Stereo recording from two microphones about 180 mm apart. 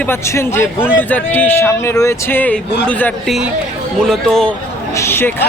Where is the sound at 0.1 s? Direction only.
15° left (ahead or behind).